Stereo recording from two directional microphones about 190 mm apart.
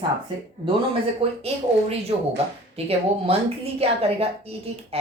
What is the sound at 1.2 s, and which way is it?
Speech, 30° right (ahead or behind).